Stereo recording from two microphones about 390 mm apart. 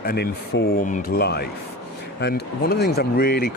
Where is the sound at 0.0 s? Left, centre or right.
Left.